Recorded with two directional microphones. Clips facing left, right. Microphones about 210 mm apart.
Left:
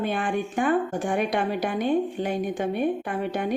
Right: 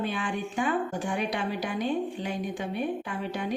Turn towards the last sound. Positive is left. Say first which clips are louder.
# left 5 dB
turn(degrees=50)  # may be behind; listen again after turning